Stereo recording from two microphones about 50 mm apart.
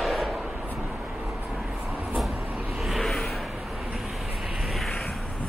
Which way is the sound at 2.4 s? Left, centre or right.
Right.